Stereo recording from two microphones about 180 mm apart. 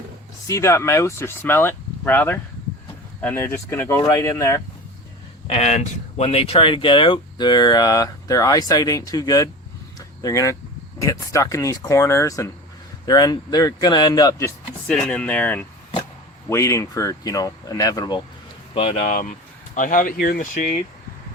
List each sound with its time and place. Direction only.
0.4 s speech: 15° left (ahead or behind)
5.5 s speech: 40° left (ahead or behind); by 14.5 s 20° left (ahead or behind)
14.8 s speech: 5° left (ahead or behind); by 18.2 s 20° left (ahead or behind)
18.7 s speech: 35° left (ahead or behind); by 20.7 s 50° left (ahead or behind)